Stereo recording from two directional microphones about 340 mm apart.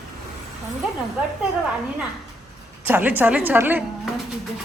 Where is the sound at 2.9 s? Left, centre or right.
Centre.